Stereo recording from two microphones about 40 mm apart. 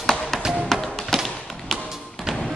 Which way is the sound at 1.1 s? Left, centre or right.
Centre.